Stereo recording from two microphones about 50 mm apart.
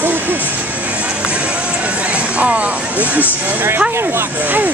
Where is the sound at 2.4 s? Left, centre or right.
Right.